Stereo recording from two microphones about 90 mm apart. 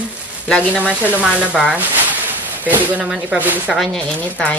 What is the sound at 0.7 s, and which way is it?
Speech, 15° right (ahead or behind).